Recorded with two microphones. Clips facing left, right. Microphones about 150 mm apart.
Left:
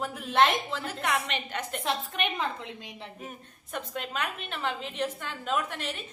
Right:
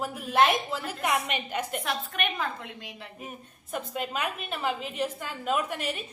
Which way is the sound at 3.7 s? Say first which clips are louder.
Right 3 dB; 5° right (ahead or behind).